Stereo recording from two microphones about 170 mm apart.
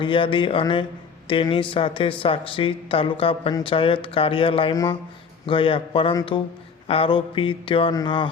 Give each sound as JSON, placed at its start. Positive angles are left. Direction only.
{"t": 0.0, "sound": "speech", "side_deg": 30}